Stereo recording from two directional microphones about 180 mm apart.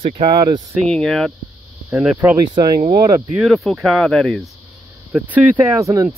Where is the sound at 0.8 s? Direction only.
5° left (ahead or behind).